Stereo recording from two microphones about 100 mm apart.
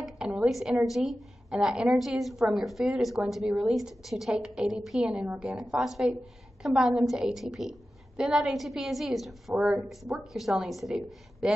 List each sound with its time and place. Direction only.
0.0 s a woman's voice: 10° right (ahead or behind)